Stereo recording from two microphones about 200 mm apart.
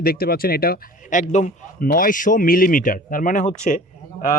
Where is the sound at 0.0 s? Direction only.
50° left (ahead or behind).